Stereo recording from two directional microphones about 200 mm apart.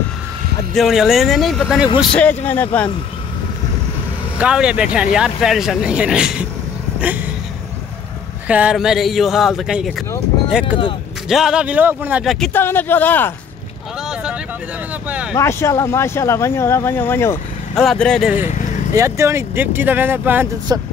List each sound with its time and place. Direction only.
0.7 s speech: centre (ahead or behind)
4.4 s speech: 5° right (ahead or behind)
7.0 s a sound: 10° right (ahead or behind)
8.5 s speech: 5° right (ahead or behind)
11.2 s speech: 5° right (ahead or behind)
12.5 s speech: 10° left (ahead or behind)
15.3 s speech: 15° left (ahead or behind)
18.9 s speech: 15° right (ahead or behind)